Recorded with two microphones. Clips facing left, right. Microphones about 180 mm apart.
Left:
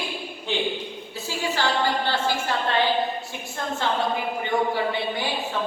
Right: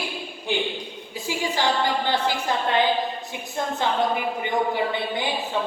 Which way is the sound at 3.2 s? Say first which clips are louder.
Right 2 dB; 20° right (ahead or behind).